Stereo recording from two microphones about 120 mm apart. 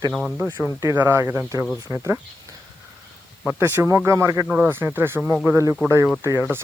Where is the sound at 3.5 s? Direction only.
20° right (ahead or behind).